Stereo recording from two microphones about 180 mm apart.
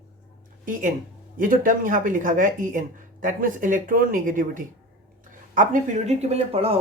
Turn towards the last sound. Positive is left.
turn(degrees=-35)  # may be behind; listen again after turning